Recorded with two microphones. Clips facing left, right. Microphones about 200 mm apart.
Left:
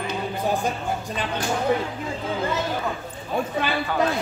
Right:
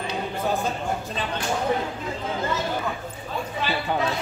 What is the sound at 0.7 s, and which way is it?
Speech, 15° left (ahead or behind).